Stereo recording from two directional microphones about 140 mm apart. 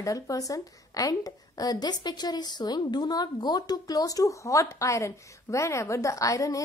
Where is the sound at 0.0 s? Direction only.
25° left (ahead or behind).